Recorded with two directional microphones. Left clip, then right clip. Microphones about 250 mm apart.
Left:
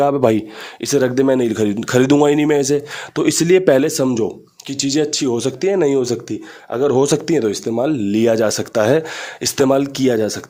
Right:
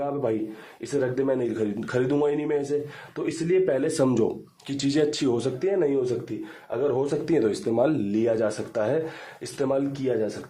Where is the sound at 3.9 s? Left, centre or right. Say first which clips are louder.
Left 5 dB; centre; by 7.2 s left.